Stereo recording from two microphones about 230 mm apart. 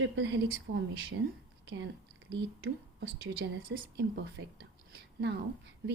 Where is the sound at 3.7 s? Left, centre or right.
Right.